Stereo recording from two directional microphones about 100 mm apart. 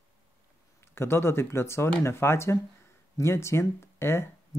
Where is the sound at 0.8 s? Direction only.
25° left (ahead or behind).